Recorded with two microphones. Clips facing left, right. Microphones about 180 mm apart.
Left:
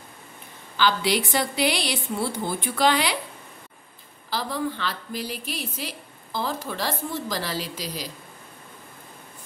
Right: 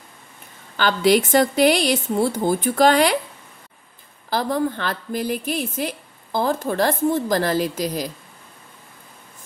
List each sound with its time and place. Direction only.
0.7 s a woman's voice: 50° right (ahead or behind)
4.3 s a woman's voice: 50° right (ahead or behind)